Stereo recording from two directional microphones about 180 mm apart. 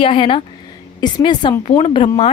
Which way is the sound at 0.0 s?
30° left (ahead or behind).